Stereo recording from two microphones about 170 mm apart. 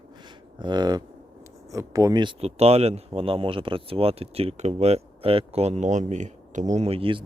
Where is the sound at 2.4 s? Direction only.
35° right (ahead or behind).